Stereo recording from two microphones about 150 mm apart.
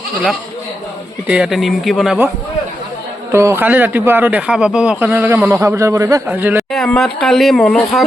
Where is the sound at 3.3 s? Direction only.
20° right (ahead or behind).